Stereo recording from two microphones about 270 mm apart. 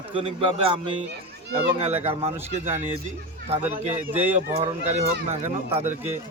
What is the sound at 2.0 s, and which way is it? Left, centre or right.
Speech, right.